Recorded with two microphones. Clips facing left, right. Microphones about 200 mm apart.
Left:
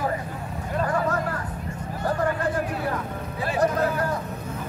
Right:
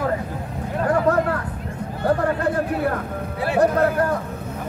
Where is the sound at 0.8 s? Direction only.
60° right (ahead or behind).